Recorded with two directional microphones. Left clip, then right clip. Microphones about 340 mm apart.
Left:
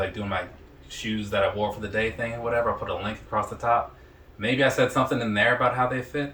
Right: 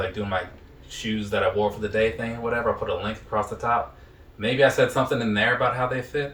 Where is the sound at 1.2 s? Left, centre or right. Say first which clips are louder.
Right 2 dB; centre.